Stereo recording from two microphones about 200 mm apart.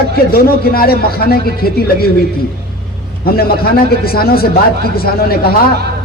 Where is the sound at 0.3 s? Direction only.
50° left (ahead or behind).